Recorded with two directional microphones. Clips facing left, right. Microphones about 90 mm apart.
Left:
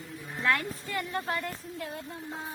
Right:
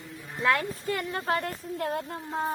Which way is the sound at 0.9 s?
40° right (ahead or behind).